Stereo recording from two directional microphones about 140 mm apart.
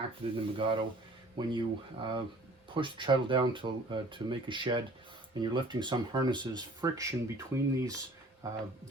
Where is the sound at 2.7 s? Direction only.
35° right (ahead or behind).